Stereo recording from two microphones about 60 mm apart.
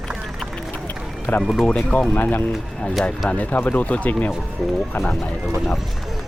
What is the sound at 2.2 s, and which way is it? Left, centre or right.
Speech, left.